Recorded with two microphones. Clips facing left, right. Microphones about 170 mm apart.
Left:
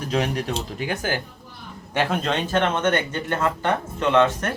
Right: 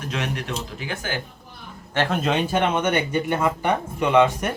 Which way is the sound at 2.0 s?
5° right (ahead or behind).